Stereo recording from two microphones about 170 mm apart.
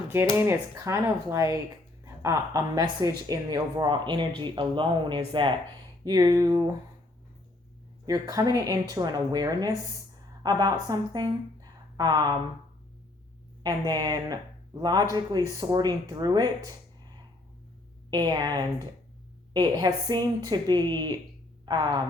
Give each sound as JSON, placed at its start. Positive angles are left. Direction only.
{"t": 0.1, "sound": "speech", "side_deg": -15}
{"t": 8.0, "sound": "a woman's voice", "side_deg": -20}
{"t": 13.6, "sound": "speech", "side_deg": -25}
{"t": 18.1, "sound": "speech", "side_deg": -25}